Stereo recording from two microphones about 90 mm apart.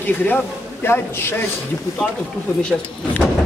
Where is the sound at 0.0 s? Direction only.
20° left (ahead or behind).